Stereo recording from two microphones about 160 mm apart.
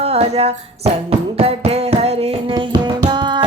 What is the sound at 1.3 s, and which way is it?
Music, 40° right (ahead or behind).